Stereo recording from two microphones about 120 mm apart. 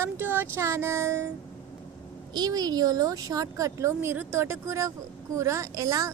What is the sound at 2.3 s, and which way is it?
A woman's voice, 35° right (ahead or behind).